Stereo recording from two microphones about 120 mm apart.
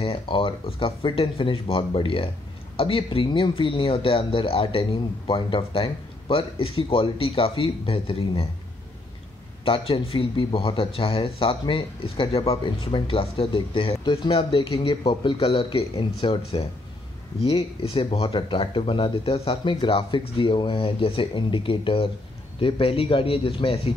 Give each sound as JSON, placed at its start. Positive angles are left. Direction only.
{"t": 0.0, "sound": "speech", "side_deg": 50}
{"t": 9.7, "sound": "speech", "side_deg": 50}